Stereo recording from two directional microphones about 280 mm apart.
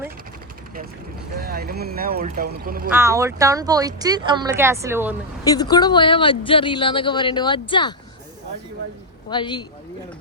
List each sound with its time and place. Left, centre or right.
1.4 s speech: right
2.9 s speech: centre
5.5 s speech: centre
9.3 s speech: centre